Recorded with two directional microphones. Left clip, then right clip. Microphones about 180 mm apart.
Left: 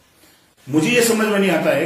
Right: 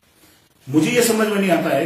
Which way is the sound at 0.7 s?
15° right (ahead or behind).